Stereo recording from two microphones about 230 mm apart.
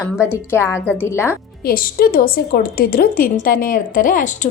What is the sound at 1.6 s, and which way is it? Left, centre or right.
A woman's voice, left.